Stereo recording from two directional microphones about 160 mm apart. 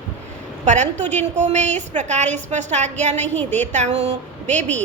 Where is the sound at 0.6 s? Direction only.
45° right (ahead or behind).